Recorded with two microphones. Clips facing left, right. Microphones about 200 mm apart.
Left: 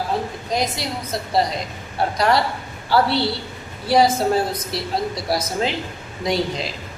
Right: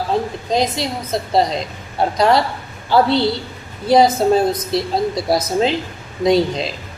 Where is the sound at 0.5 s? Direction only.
25° right (ahead or behind).